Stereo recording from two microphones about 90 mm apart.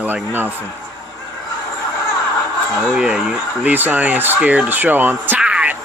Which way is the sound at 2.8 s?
10° right (ahead or behind).